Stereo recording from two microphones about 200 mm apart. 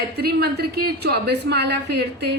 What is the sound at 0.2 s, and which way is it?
A woman's voice, 50° right (ahead or behind).